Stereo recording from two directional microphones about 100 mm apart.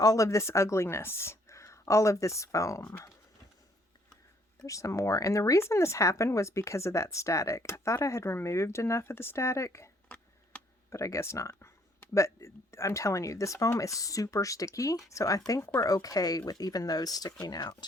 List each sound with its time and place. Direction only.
0.0 s speech: 35° left (ahead or behind)
4.6 s speech: 30° left (ahead or behind)
10.5 s computer keyboard: 10° left (ahead or behind)
10.9 s speech: 30° left (ahead or behind)